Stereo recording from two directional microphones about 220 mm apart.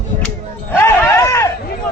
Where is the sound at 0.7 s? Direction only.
10° left (ahead or behind).